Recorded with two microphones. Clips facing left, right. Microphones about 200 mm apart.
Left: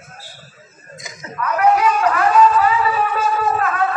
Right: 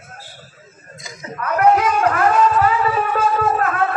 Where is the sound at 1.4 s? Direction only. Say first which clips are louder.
Right 1 dB; 50° right (ahead or behind).